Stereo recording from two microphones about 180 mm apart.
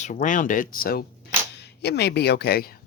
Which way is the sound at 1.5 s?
70° left (ahead or behind).